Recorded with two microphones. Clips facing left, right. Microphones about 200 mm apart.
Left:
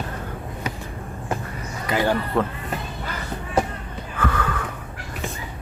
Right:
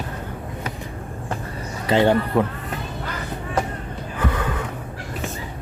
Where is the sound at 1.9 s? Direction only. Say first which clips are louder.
Right 5 dB; 25° right (ahead or behind).